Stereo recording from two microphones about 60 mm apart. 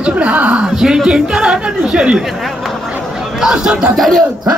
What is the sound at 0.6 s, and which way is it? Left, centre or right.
A woman's voice, centre.